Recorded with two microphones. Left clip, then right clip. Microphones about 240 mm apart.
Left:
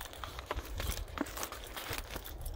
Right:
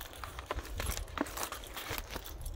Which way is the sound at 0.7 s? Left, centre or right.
Right.